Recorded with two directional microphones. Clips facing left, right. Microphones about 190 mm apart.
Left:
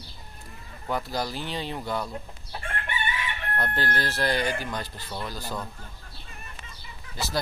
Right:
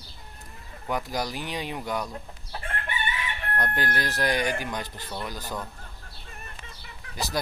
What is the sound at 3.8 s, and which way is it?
Speech, 15° right (ahead or behind).